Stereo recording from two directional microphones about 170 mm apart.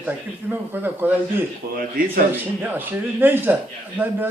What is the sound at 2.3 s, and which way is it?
A man's voice, 10° right (ahead or behind).